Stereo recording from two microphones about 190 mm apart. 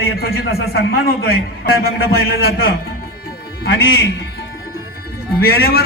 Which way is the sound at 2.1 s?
55° left (ahead or behind).